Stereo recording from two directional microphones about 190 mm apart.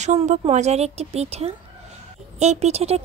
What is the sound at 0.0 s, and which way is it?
Speech, 35° right (ahead or behind).